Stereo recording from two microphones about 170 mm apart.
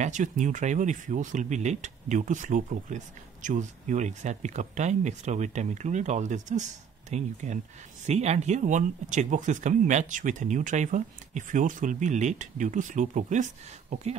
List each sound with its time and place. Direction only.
0.0 s speech: 45° right (ahead or behind)